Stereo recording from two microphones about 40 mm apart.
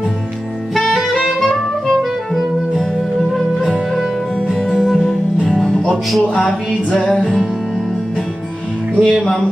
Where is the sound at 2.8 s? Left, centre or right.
Centre.